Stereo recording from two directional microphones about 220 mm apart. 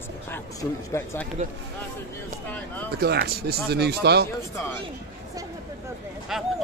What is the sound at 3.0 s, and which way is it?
Speech, 45° right (ahead or behind).